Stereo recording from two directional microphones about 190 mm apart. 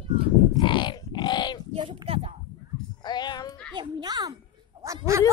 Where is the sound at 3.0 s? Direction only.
20° left (ahead or behind).